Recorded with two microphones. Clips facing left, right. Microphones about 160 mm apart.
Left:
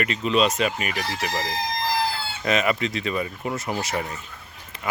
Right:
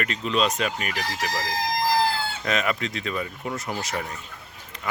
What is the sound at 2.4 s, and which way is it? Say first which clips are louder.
Speech: left 5 dB; 5° left (ahead or behind).